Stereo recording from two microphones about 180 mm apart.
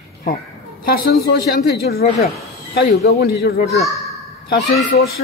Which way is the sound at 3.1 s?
60° left (ahead or behind).